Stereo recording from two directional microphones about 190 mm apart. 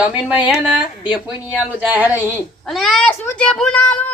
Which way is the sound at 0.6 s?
5° right (ahead or behind).